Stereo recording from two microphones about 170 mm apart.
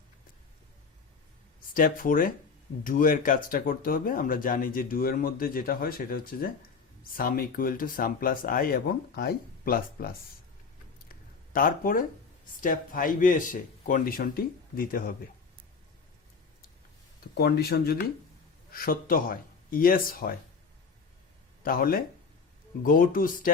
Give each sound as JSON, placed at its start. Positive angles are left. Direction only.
{"t": 1.7, "sound": "speech", "side_deg": 55}
{"t": 11.5, "sound": "speech", "side_deg": 55}
{"t": 17.3, "sound": "speech", "side_deg": 70}
{"t": 18.7, "sound": "speech", "side_deg": 60}
{"t": 21.6, "sound": "speech", "side_deg": 60}